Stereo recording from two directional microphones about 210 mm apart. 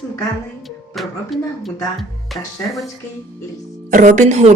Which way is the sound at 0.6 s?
Centre (ahead or behind).